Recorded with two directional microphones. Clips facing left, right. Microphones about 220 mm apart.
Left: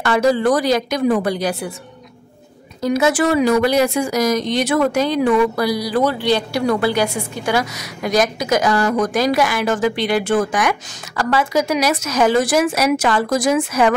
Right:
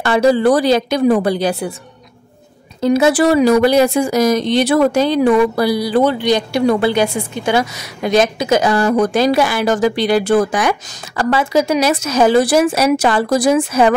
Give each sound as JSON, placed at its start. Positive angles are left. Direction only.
{"t": 0.0, "sound": "a woman's voice", "side_deg": -30}
{"t": 2.8, "sound": "speech", "side_deg": -30}